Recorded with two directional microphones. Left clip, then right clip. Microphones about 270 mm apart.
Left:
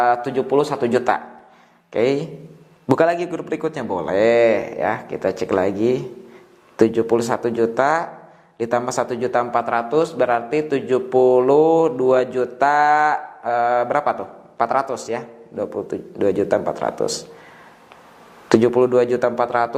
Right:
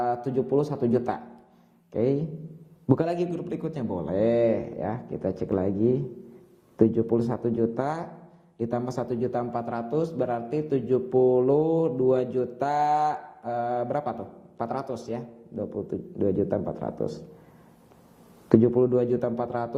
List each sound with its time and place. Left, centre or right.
0.0 s mantra: centre
1.9 s speech: centre
3.5 s mantra: centre
11.5 s mantra: left
11.8 s mantra: centre
18.4 s mantra: centre